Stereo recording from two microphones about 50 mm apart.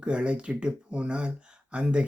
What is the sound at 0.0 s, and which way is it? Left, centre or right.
Speech, right.